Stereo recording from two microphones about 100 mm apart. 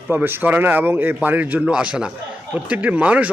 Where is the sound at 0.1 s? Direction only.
20° right (ahead or behind).